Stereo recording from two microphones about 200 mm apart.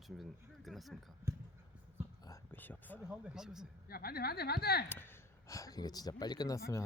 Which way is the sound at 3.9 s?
50° left (ahead or behind).